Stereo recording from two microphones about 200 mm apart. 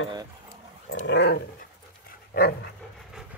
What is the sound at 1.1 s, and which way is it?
Dog, 55° left (ahead or behind).